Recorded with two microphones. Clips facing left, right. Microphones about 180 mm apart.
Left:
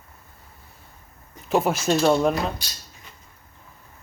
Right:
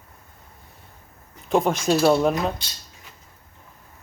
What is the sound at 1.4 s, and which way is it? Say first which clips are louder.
Speech: right 1 dB; 5° left (ahead or behind).